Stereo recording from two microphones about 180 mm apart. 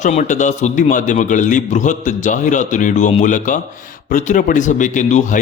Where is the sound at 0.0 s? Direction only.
45° left (ahead or behind).